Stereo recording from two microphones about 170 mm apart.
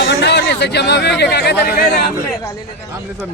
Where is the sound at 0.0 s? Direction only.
85° left.